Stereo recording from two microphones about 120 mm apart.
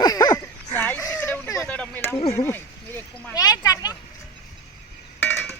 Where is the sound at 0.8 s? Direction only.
15° left (ahead or behind).